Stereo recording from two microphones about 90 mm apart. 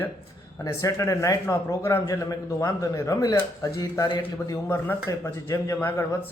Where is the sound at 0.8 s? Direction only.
35° left (ahead or behind).